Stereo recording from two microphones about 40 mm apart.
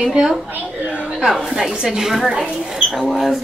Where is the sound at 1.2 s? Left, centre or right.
Centre.